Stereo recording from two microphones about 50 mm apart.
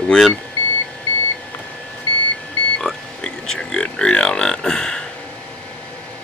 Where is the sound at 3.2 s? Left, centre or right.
Centre.